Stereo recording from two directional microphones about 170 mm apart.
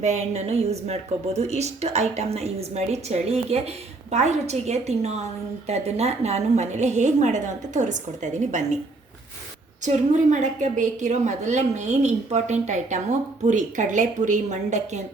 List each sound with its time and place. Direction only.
0.0 s a woman's voice: 40° right (ahead or behind)
9.8 s a woman's voice: 45° right (ahead or behind)